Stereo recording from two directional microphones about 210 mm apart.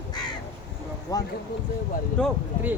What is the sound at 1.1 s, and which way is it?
Speech, 15° left (ahead or behind).